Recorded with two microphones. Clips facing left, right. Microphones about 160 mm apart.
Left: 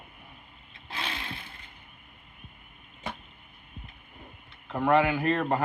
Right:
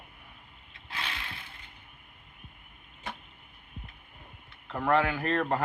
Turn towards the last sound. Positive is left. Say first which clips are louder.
# left 3 dB
turn(degrees=5)  # may be behind; listen again after turning